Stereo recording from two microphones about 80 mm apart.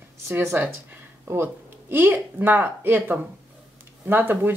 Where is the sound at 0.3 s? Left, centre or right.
Right.